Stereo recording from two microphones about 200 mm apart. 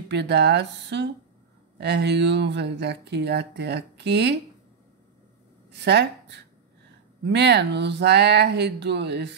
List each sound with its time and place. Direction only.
0.1 s speech: 60° right (ahead or behind)
5.7 s speech: 60° right (ahead or behind)